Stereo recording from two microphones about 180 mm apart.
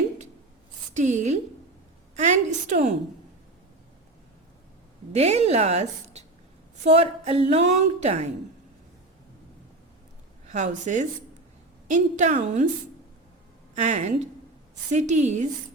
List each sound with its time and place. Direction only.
0.9 s a woman's voice: 40° right (ahead or behind)
5.1 s a woman's voice: 35° right (ahead or behind)
10.4 s a woman's voice: 40° right (ahead or behind)
13.7 s a woman's voice: 40° right (ahead or behind)